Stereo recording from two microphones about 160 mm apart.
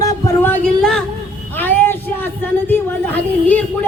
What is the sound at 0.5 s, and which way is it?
A man's voice, 5° left (ahead or behind).